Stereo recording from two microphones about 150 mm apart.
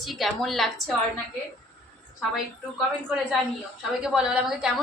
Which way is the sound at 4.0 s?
5° right (ahead or behind).